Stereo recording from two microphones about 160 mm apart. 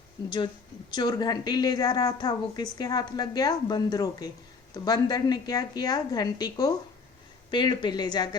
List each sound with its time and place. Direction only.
0.3 s a woman's voice: 30° left (ahead or behind)